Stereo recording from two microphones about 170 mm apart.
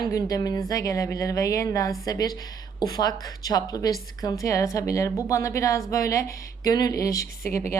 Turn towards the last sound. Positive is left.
turn(degrees=20)  # may be behind; listen again after turning